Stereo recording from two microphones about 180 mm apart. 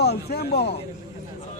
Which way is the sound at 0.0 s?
60° left (ahead or behind).